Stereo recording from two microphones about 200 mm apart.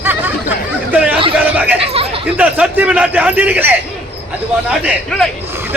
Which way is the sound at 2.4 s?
5° right (ahead or behind).